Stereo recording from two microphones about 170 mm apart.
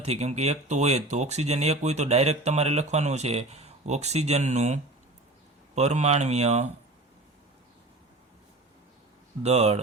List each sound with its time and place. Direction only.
0.0 s speech: 40° right (ahead or behind)
9.4 s speech: 40° right (ahead or behind)